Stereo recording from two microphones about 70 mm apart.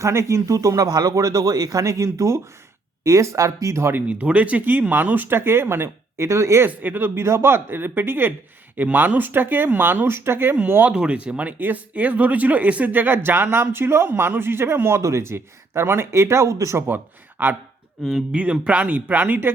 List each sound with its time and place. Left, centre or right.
0.0 s speech: right
3.9 s speech: right
6.7 s speech: right
7.2 s speech: right
10.9 s speech: centre; by 16.8 s right
16.8 s a man's voice: right
18.0 s speech: centre
18.3 s speech: centre